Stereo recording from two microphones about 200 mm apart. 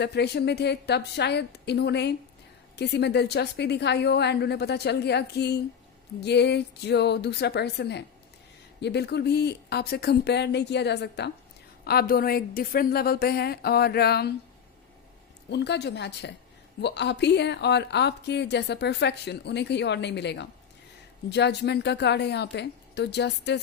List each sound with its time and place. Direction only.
0.0 s a woman's voice: 55° left (ahead or behind)
15.4 s a woman's voice: 60° left (ahead or behind)